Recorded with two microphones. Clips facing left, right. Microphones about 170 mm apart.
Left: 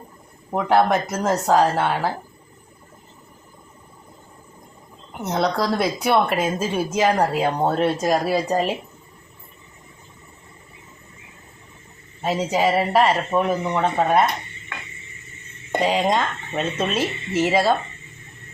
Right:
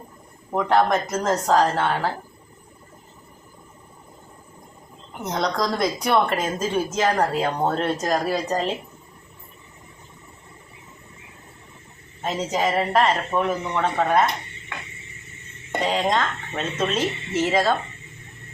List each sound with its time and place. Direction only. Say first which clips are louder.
0.5 s a woman's voice: left 1 dB; 10° left (ahead or behind)
5.2 s a woman's voice: left 2 dB; 5° left (ahead or behind)
12.2 s a woman's voice: left 3 dB; 10° left (ahead or behind)
15.8 s a woman's voice: left 2 dB; 10° left (ahead or behind)